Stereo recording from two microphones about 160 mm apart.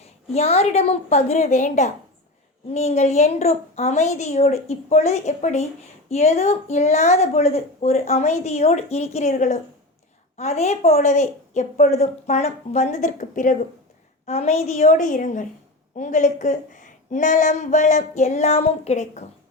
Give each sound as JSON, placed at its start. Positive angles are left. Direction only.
{"t": 0.0, "sound": "a woman's voice", "side_deg": 40}
{"t": 14.3, "sound": "a woman's voice", "side_deg": 40}